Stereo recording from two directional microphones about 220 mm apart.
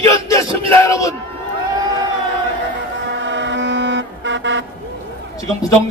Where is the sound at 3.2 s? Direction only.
55° right (ahead or behind).